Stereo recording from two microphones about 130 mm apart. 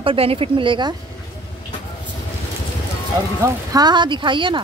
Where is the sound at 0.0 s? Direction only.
45° right (ahead or behind).